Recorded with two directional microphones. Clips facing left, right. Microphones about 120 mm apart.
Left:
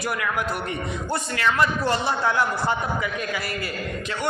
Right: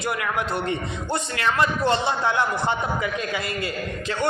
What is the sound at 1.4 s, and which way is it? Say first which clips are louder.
A man's voice: even; 25° right (ahead or behind).